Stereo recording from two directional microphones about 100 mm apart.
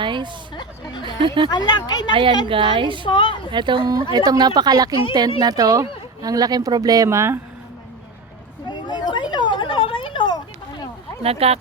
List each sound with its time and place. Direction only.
0.0 s a woman's voice: 50° right (ahead or behind)
0.5 s speech: 50° left (ahead or behind)
1.2 s speech: 55° right (ahead or behind)
1.5 s speech: 45° left (ahead or behind)
2.5 s a woman's voice: 60° right (ahead or behind)
3.1 s a woman's voice: 55° left (ahead or behind)
3.5 s speech: 50° right (ahead or behind); by 7.3 s 30° right (ahead or behind)
8.7 s a sound: 50° left (ahead or behind)
11.2 s speech: 85° right